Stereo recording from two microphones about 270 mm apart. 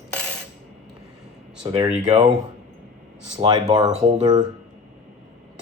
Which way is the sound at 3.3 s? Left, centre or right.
Centre.